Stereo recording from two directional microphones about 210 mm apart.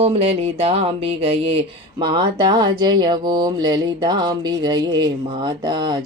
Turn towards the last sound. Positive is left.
turn(degrees=-20)  # may be behind; listen again after turning